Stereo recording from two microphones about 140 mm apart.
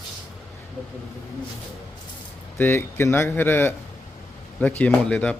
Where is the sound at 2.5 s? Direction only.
15° left (ahead or behind).